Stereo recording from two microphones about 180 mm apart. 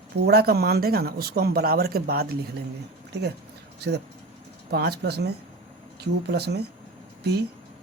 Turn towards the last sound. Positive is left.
turn(degrees=-65)  # may be behind; listen again after turning